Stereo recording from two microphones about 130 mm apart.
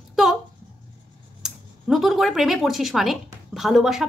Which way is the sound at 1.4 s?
Centre (ahead or behind).